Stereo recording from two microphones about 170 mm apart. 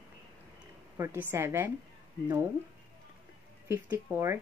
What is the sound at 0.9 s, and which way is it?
A woman's voice, 15° right (ahead or behind).